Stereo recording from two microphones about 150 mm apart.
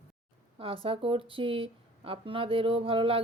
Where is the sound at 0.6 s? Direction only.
35° right (ahead or behind).